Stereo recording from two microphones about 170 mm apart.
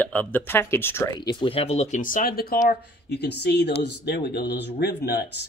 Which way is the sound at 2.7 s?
80° left.